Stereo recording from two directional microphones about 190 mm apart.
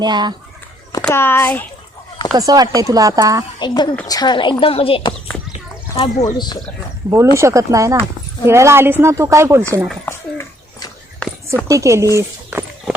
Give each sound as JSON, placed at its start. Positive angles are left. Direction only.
{"t": 0.0, "sound": "speech", "side_deg": -20}
{"t": 1.0, "sound": "speech", "side_deg": 10}
{"t": 2.3, "sound": "speech", "side_deg": -20}
{"t": 3.6, "sound": "a woman's voice", "side_deg": 25}
{"t": 6.3, "sound": "a woman's voice", "side_deg": 20}
{"t": 7.3, "sound": "speech", "side_deg": -15}
{"t": 10.1, "sound": "dog", "side_deg": 15}
{"t": 11.7, "sound": "speech", "side_deg": -15}